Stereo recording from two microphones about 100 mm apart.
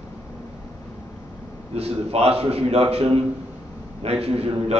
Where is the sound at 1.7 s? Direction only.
85° right.